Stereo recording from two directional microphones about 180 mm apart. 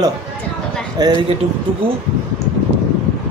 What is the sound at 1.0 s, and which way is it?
Speech, 20° right (ahead or behind).